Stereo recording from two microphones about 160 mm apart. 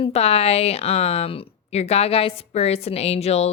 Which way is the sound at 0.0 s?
40° left (ahead or behind).